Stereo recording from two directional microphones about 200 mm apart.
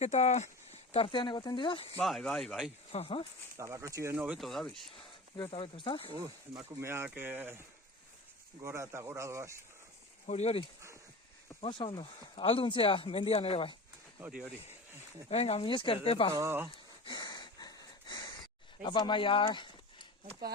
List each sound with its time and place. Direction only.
0.0 s speech: 35° left (ahead or behind)
2.0 s speech: centre (ahead or behind)
2.9 s speech: 30° left (ahead or behind)
3.6 s speech: 15° right (ahead or behind); by 4.9 s centre (ahead or behind)
5.4 s speech: 25° left (ahead or behind)
6.1 s speech: 20° right (ahead or behind)
8.6 s speech: 15° right (ahead or behind)
10.2 s speech: 35° left (ahead or behind)
14.2 s speech: 5° right (ahead or behind)
15.3 s speech: 30° left (ahead or behind)
16.3 s speech: 15° right (ahead or behind)
16.7 s wheeze: 25° left (ahead or behind)
18.8 s speech: 25° left (ahead or behind)